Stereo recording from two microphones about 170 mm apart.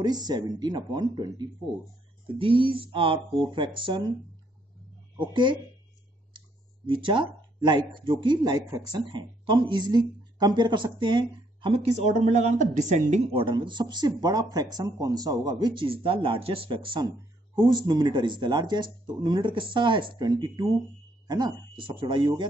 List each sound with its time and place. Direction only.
0.0 s speech: 25° right (ahead or behind)
5.3 s speech: 25° right (ahead or behind)
6.9 s speech: 30° right (ahead or behind)